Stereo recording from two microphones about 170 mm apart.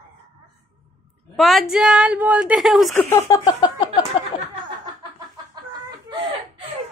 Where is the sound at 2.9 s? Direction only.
15° left (ahead or behind).